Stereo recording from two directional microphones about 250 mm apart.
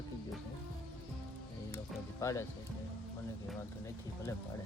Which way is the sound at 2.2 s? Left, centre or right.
Centre.